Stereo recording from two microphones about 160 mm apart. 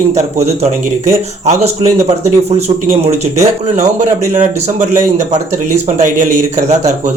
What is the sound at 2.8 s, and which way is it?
Speech, 40° right (ahead or behind).